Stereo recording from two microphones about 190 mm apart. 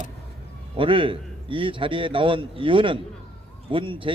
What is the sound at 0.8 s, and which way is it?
A man's voice, 25° right (ahead or behind).